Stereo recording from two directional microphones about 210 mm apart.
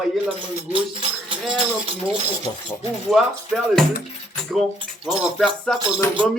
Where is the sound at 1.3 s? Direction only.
25° right (ahead or behind).